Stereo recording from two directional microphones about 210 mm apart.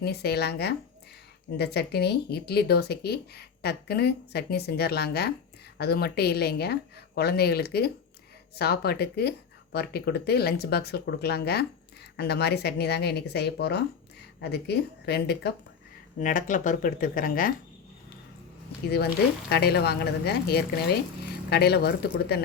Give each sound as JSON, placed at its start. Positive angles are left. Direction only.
{"t": 0.0, "sound": "speech", "side_deg": 50}
{"t": 16.1, "sound": "speech", "side_deg": 40}
{"t": 18.9, "sound": "speech", "side_deg": 50}